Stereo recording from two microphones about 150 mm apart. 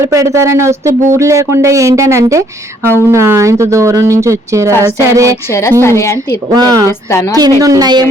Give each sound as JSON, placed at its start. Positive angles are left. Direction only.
{"t": 0.0, "sound": "speech", "side_deg": -20}
{"t": 5.5, "sound": "a woman's voice", "side_deg": 20}
{"t": 6.5, "sound": "speech", "side_deg": -25}
{"t": 7.1, "sound": "a woman's voice", "side_deg": 20}
{"t": 7.6, "sound": "speech", "side_deg": -25}